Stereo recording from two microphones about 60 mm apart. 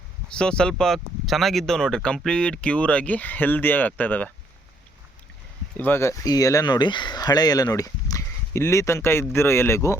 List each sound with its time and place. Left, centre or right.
0.3 s speech: centre
5.7 s speech: left
6.2 s speech: left
7.1 s speech: left
8.5 s speech: left